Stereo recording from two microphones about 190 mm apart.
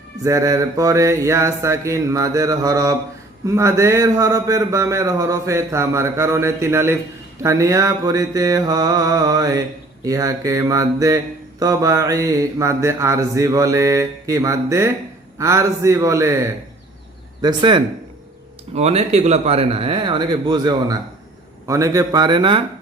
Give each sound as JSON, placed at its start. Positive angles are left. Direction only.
{"t": 0.2, "sound": "mantra", "side_deg": -15}
{"t": 17.4, "sound": "a man's voice", "side_deg": -25}